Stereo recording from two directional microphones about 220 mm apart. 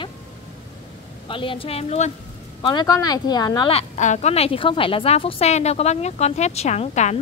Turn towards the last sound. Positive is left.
turn(degrees=30)  # may be behind; listen again after turning